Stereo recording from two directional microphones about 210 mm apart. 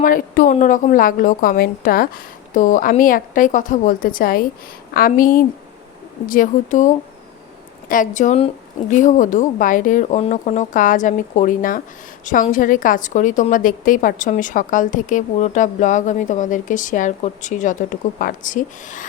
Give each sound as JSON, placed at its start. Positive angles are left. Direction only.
{"t": 0.0, "sound": "a woman's voice", "side_deg": 40}